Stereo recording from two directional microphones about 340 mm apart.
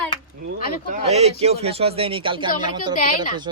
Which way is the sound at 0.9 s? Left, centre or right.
Centre.